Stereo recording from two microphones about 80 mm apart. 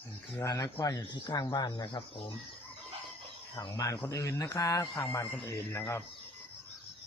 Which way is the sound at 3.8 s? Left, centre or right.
Left.